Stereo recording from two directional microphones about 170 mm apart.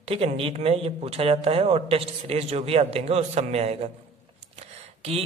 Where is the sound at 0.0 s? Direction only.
35° right (ahead or behind).